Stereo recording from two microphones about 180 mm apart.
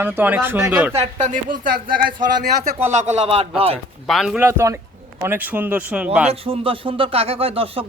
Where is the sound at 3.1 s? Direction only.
35° right (ahead or behind).